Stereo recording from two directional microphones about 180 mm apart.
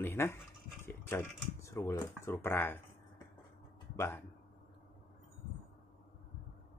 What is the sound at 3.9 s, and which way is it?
Speech, 15° left (ahead or behind).